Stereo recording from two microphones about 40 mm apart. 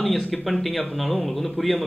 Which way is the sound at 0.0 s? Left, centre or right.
Centre.